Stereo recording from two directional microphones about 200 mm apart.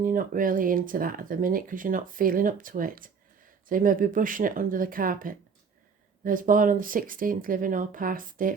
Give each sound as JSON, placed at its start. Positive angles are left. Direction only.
{"t": 0.0, "sound": "speech", "side_deg": -45}